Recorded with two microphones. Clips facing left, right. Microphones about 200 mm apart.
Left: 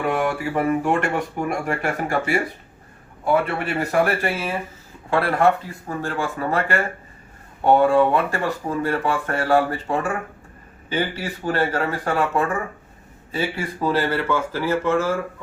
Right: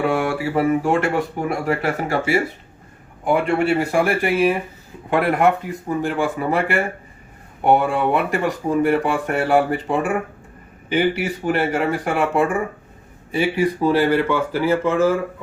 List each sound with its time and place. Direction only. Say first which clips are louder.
0.8 s speech: right 2 dB; 10° right (ahead or behind)